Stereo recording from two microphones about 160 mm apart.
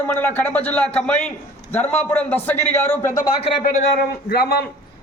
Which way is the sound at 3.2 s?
70° left (ahead or behind).